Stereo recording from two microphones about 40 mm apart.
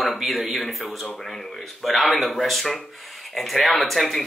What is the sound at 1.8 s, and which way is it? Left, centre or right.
Speech, centre.